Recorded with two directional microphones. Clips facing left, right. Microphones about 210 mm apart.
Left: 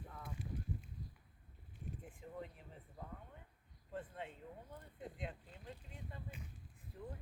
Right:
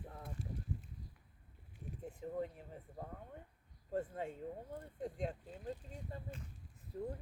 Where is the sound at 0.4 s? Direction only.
25° right (ahead or behind).